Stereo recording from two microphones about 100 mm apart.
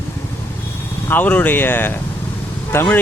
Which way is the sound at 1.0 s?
20° left (ahead or behind).